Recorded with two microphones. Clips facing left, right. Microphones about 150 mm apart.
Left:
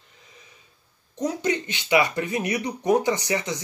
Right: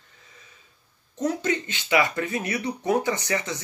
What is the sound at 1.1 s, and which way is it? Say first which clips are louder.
Speech: even; 15° left (ahead or behind).